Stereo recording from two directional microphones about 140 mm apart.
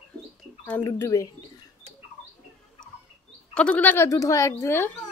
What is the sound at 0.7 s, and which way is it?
Speech, 20° left (ahead or behind).